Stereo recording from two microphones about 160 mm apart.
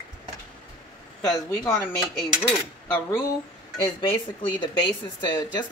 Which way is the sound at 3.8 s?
30° left (ahead or behind).